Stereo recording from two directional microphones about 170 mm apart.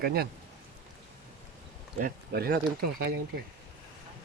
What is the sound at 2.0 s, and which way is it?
Speech, 65° right (ahead or behind).